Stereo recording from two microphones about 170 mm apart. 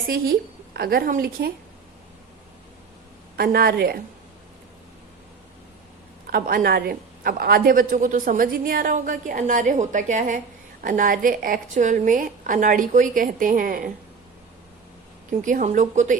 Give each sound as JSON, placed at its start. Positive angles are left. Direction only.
{"t": 0.1, "sound": "a woman's voice", "side_deg": -65}
{"t": 3.3, "sound": "a woman's voice", "side_deg": -60}
{"t": 6.2, "sound": "a woman's voice", "side_deg": -60}
{"t": 15.3, "sound": "a woman's voice", "side_deg": -50}